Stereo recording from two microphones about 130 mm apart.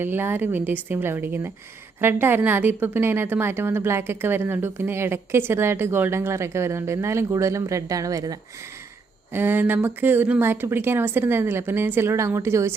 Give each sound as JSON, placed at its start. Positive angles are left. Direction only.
{"t": 0.0, "sound": "a woman's voice", "side_deg": -15}
{"t": 9.3, "sound": "speech", "side_deg": -15}